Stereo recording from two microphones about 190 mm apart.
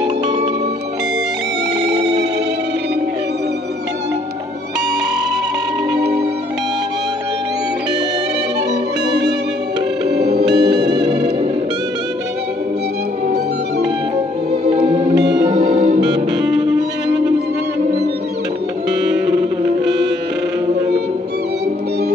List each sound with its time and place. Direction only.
5.9 s music: 60° right (ahead or behind)
10.6 s music: 25° right (ahead or behind)
14.7 s music: 30° right (ahead or behind)
16.0 s saxophone: 20° right (ahead or behind)
18.9 s music: 20° right (ahead or behind)